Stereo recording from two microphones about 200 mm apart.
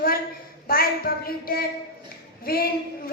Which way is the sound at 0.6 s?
45° left (ahead or behind).